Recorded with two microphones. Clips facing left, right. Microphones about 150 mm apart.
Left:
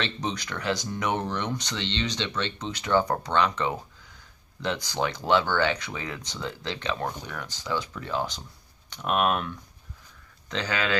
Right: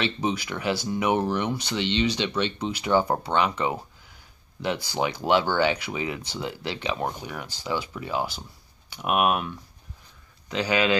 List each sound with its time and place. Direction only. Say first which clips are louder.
0.0 s speech: right 4 dB; 10° right (ahead or behind)
10.5 s speech: right 5 dB; 15° right (ahead or behind)